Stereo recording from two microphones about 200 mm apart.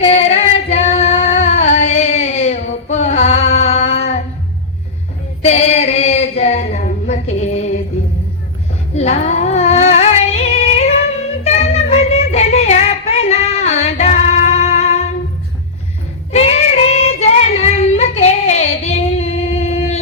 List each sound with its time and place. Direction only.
0.0 s female singing: 30° left (ahead or behind)
5.4 s a sound: 30° left (ahead or behind)
7.1 s music: 35° left (ahead or behind)
9.0 s female singing: 35° left (ahead or behind)
11.4 s music: 30° left (ahead or behind)
16.3 s child singing: 30° left (ahead or behind)
17.6 s female singing: 35° left (ahead or behind)